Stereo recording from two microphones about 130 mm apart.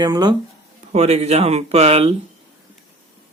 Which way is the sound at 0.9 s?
55° right (ahead or behind).